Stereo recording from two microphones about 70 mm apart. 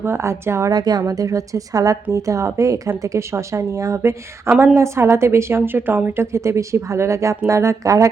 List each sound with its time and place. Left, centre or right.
0.0 s a woman's voice: right
0.7 s a woman's voice: right
4.5 s a woman's voice: right
6.3 s speech: right